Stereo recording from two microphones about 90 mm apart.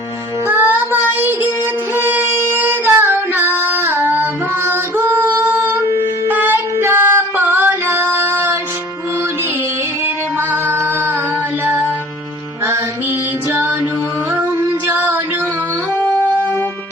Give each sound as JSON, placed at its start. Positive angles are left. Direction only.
{"t": 0.4, "sound": "music", "side_deg": -20}
{"t": 2.0, "sound": "female singing", "side_deg": -25}
{"t": 6.2, "sound": "music", "side_deg": -20}
{"t": 16.0, "sound": "music", "side_deg": 25}